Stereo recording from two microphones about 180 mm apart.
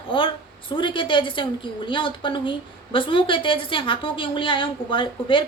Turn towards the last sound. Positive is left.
turn(degrees=30)  # may be behind; listen again after turning